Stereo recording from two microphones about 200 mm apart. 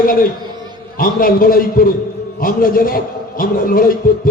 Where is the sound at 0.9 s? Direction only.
45° left (ahead or behind).